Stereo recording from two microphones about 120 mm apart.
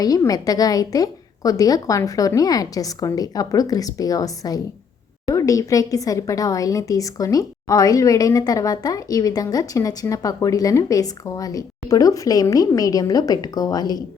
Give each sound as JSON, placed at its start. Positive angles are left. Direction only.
{"t": 0.0, "sound": "a woman's voice", "side_deg": 30}